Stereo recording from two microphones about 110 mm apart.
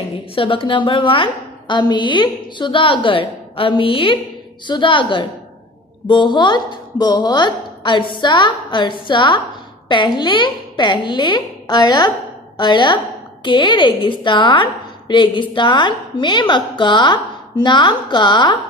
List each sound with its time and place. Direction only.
0.3 s a woman's voice: 55° left (ahead or behind)